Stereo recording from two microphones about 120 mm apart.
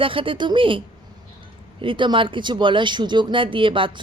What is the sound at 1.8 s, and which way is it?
Speech, 45° right (ahead or behind).